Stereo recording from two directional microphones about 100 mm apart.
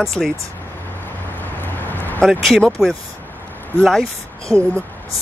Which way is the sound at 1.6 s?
20° left (ahead or behind).